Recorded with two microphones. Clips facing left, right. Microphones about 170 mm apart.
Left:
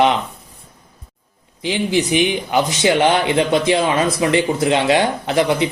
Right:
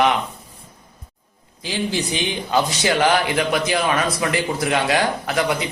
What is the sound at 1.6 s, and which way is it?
A man's voice, 15° left (ahead or behind).